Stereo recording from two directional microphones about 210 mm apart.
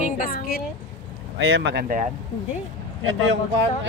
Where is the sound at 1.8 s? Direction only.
40° right (ahead or behind).